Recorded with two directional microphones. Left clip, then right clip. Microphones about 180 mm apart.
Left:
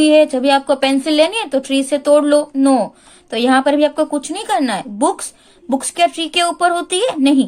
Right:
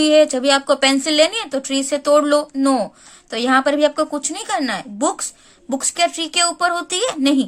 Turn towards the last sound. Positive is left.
turn(degrees=-15)  # may be behind; listen again after turning